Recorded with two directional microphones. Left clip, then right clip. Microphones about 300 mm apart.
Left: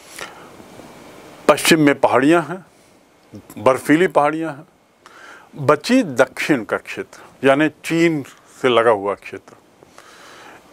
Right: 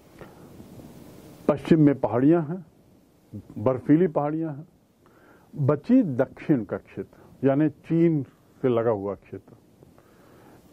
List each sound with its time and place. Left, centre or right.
0.1 s a sound: centre
1.4 s speech: centre
3.6 s speech: centre